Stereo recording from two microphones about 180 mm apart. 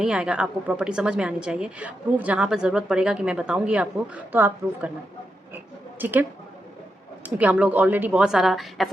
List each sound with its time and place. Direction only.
0.0 s a woman's voice: 5° right (ahead or behind)
6.0 s a woman's voice: 10° right (ahead or behind)
7.3 s a woman's voice: 10° right (ahead or behind)